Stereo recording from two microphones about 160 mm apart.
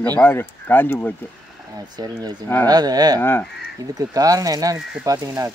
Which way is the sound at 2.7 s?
25° right (ahead or behind).